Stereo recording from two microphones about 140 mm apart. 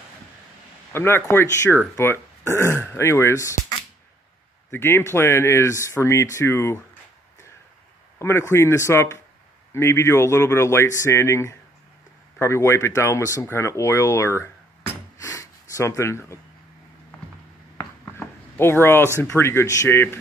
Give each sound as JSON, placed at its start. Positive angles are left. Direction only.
{"t": 0.9, "sound": "speech", "side_deg": 15}
{"t": 8.2, "sound": "speech", "side_deg": 20}
{"t": 15.1, "sound": "snort", "side_deg": 25}
{"t": 17.7, "sound": "speech", "side_deg": 20}